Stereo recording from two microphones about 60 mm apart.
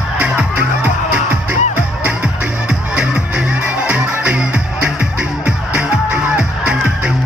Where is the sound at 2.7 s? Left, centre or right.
Centre.